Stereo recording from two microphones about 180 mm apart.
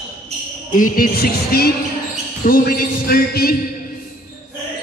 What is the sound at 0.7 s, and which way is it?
Speech, 50° left (ahead or behind).